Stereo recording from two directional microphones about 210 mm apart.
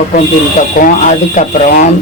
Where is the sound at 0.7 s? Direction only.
40° left (ahead or behind).